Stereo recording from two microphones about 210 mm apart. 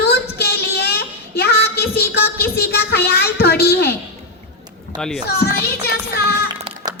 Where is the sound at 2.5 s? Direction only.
50° left (ahead or behind).